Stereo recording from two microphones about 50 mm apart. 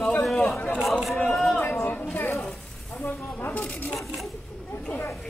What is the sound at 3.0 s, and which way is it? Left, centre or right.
Speech, left.